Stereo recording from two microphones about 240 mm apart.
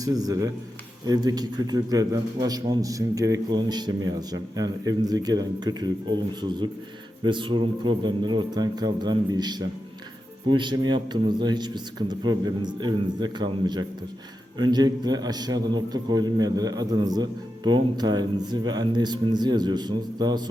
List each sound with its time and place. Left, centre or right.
0.0 s a man's voice: centre